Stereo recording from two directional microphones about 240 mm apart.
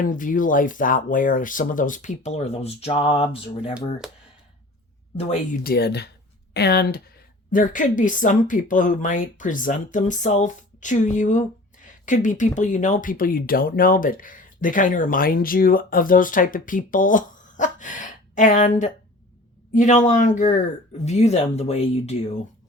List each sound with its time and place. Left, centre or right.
0.0 s speech: left
4.0 s speech: centre
5.6 s speech: left